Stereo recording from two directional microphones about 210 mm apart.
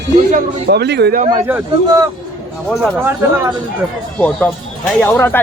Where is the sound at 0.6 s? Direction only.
50° right (ahead or behind).